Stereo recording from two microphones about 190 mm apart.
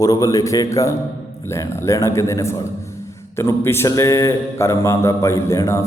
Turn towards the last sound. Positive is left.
turn(degrees=15)  # may be behind; listen again after turning